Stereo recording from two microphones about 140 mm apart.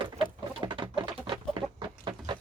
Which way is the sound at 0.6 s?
35° right (ahead or behind).